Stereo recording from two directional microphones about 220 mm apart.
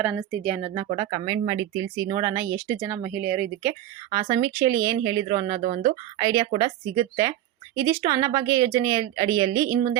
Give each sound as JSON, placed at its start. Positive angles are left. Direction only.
{"t": 0.0, "sound": "a woman's voice", "side_deg": -5}
{"t": 0.7, "sound": "speech", "side_deg": -15}